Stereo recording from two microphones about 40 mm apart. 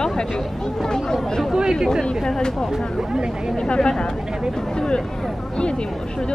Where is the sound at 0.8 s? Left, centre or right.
Centre.